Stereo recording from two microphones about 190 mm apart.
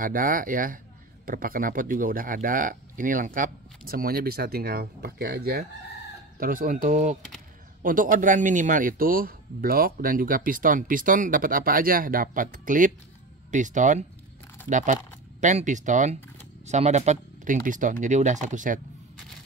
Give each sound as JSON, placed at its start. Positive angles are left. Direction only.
{"t": 0.0, "sound": "speech", "side_deg": -45}